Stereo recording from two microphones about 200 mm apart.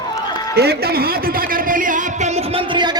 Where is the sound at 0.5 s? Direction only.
55° right (ahead or behind).